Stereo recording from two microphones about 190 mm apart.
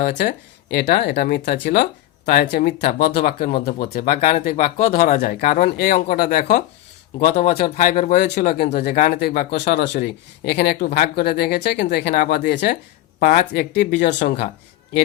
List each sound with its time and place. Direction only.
0.0 s speech: 55° left (ahead or behind)
7.3 s speech: 35° left (ahead or behind)
7.5 s speech: 45° left (ahead or behind)
13.9 s speech: 40° left (ahead or behind)